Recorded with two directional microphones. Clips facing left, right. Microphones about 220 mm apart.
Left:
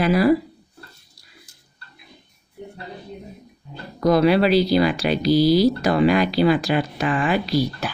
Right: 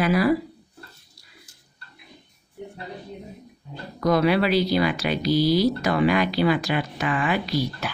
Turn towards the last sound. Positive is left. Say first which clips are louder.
# left 4 dB
turn(degrees=35)  # may be behind; listen again after turning